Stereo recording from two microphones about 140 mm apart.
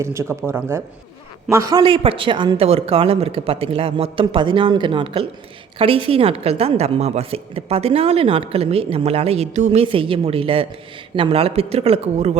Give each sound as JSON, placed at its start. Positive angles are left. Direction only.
{"t": 0.0, "sound": "speech", "side_deg": -20}
{"t": 1.8, "sound": "a woman's voice", "side_deg": -40}